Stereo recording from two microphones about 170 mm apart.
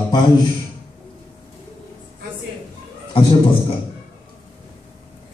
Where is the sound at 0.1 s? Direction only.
25° left (ahead or behind).